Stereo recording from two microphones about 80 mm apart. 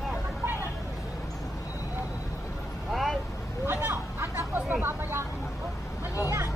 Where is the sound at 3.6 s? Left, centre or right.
Right.